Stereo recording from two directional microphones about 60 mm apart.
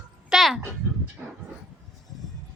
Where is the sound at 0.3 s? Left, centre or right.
Centre.